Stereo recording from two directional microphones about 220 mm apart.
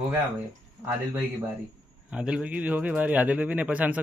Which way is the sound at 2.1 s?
5° right (ahead or behind).